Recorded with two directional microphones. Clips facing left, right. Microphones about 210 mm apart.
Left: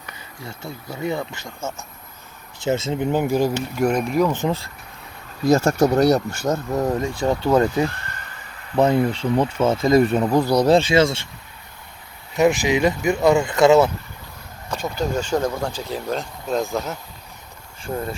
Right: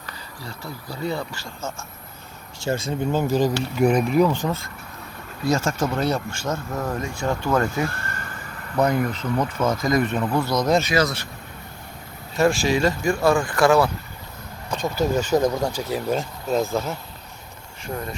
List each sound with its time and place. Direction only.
0.0 s speech: 20° left (ahead or behind)
2.6 s speech: 20° left (ahead or behind)
3.8 s speech: 5° right (ahead or behind)
4.3 s speech: 20° left (ahead or behind)
5.4 s speech: 40° left (ahead or behind)
7.3 s speech: 20° left (ahead or behind)
7.9 s a sound: 55° right (ahead or behind)
8.7 s speech: 25° left (ahead or behind)
12.4 s speech: 20° left (ahead or behind)
14.9 s speech: 5° right (ahead or behind)